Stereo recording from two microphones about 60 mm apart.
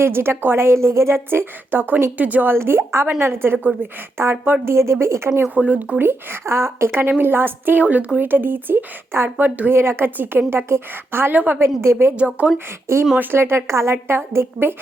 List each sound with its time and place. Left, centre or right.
0.0 s a woman's voice: right
2.5 s a woman's voice: right
5.5 s speech: right
6.0 s a woman's voice: right
11.3 s speech: right
11.6 s a woman's voice: right
12.1 s speech: centre
13.1 s a woman's voice: right